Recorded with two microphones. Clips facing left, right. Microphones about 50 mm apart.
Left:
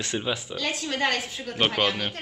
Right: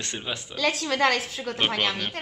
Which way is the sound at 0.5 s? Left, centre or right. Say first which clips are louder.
Right 4 dB; right.